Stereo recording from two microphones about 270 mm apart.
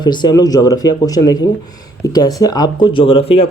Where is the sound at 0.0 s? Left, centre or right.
Centre.